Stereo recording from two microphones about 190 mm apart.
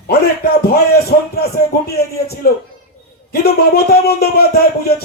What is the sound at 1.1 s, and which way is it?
Speech, 50° left (ahead or behind).